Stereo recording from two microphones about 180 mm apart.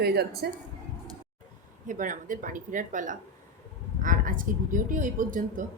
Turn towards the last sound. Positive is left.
turn(degrees=-45)  # may be behind; listen again after turning